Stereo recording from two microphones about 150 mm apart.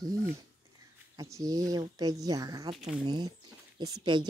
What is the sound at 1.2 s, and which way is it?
A woman's voice, 20° right (ahead or behind).